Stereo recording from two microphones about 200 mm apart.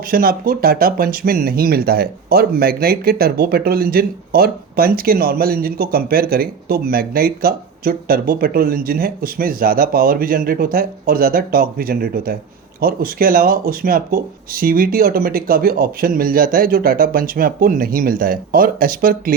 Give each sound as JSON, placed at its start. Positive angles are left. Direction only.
{"t": 0.1, "sound": "speech", "side_deg": -45}